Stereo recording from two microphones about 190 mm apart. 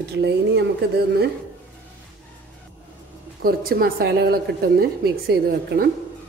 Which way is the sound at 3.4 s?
50° right (ahead or behind).